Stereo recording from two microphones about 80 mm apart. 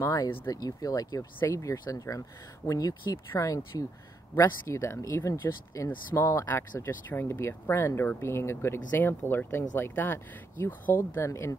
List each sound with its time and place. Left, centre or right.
0.0 s speech: left
6.4 s speech: left